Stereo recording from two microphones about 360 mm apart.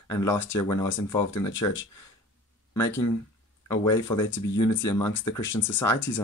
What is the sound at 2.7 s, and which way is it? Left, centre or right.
Speech, centre.